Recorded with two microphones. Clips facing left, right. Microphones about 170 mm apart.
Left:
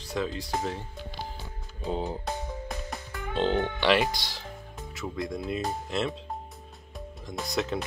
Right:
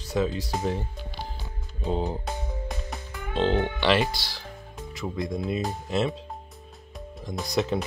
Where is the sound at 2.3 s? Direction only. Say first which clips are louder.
Even; centre (ahead or behind).